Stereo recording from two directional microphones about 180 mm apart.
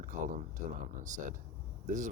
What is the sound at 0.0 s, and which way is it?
Speech, 45° right (ahead or behind).